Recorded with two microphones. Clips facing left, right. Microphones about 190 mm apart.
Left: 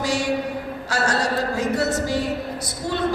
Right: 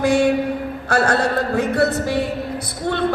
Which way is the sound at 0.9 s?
55° right (ahead or behind).